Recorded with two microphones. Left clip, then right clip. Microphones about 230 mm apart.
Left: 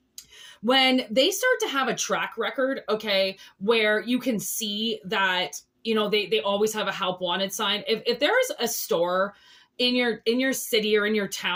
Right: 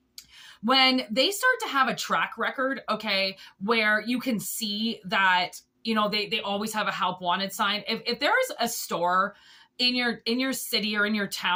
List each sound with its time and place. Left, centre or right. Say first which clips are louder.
0.6 s speech: left 1 dB; centre